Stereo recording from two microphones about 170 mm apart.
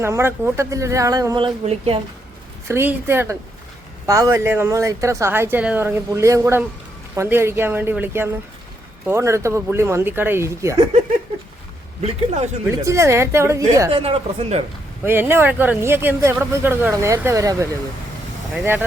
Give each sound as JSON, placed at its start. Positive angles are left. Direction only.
{"t": 0.0, "sound": "speech", "side_deg": -15}
{"t": 1.6, "sound": "speech", "side_deg": -35}
{"t": 2.6, "sound": "speech", "side_deg": -15}
{"t": 12.0, "sound": "speech", "side_deg": -40}
{"t": 12.6, "sound": "speech", "side_deg": -15}
{"t": 14.0, "sound": "speech", "side_deg": -35}
{"t": 15.0, "sound": "speech", "side_deg": -10}